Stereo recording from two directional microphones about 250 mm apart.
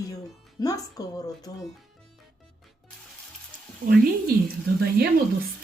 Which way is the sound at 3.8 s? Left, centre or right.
Right.